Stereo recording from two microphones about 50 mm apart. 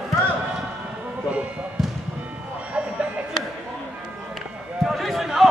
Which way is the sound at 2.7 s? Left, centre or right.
Right.